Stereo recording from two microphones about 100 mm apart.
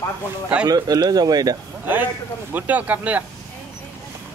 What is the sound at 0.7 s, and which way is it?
Speech, 40° right (ahead or behind).